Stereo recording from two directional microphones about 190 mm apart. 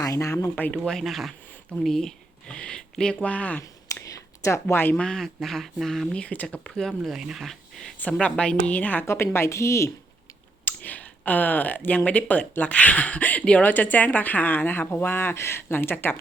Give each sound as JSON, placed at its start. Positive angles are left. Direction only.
{"t": 0.0, "sound": "speech", "side_deg": 15}